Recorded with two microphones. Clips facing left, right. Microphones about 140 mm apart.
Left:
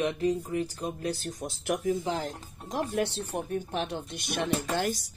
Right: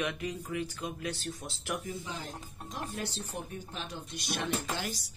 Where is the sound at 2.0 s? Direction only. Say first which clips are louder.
Left 9 dB; 90° left.